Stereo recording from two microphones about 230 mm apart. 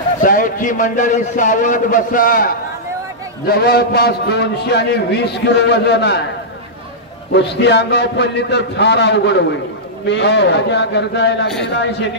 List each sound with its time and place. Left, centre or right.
0.2 s a man's voice: left
7.3 s a man's voice: left